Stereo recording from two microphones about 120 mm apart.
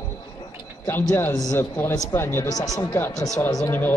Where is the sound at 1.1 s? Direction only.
20° left (ahead or behind).